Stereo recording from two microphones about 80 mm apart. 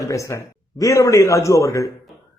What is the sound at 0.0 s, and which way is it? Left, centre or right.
Speech, left.